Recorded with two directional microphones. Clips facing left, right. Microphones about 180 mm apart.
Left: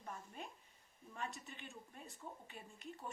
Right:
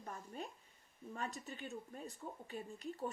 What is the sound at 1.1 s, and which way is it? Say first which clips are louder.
A woman's voice: right 3 dB; 40° right (ahead or behind).